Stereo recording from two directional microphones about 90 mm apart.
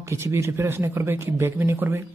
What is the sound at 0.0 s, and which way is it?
A woman's voice, 30° right (ahead or behind).